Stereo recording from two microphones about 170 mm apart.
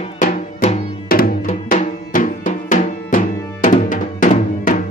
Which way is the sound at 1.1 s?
60° left (ahead or behind).